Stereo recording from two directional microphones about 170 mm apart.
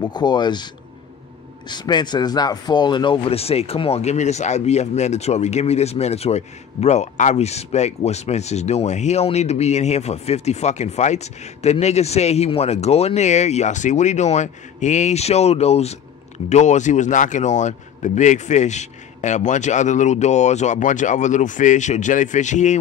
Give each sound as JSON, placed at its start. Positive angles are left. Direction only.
{"t": 0.0, "sound": "speech", "side_deg": 25}
{"t": 1.7, "sound": "speech", "side_deg": 25}